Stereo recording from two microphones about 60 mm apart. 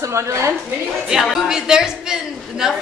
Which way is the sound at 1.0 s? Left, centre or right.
Centre.